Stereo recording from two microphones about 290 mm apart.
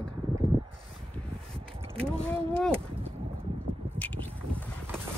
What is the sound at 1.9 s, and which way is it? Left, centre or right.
Speech, centre.